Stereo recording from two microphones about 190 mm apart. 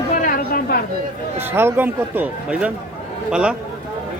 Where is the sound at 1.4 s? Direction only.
10° right (ahead or behind).